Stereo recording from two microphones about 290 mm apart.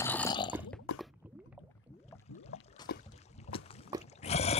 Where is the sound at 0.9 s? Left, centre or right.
Left.